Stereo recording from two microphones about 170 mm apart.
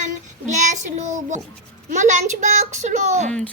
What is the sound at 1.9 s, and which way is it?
A child's voice, 45° right (ahead or behind).